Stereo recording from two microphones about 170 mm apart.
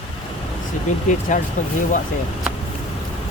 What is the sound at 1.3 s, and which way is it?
Speech, 45° left (ahead or behind).